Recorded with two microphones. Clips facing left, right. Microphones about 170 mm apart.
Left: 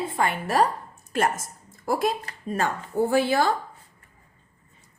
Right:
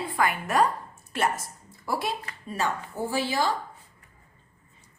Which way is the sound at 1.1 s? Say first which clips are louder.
Left 3 dB; 45° left (ahead or behind).